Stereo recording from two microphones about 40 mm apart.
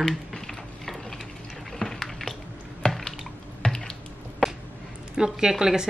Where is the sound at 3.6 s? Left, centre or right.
Centre.